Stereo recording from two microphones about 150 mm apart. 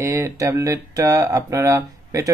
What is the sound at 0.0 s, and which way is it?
Speech, 20° right (ahead or behind).